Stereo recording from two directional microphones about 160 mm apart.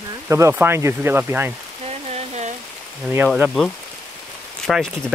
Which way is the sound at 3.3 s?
Centre (ahead or behind).